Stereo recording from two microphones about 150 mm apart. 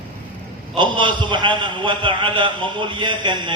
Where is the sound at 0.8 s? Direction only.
30° right (ahead or behind).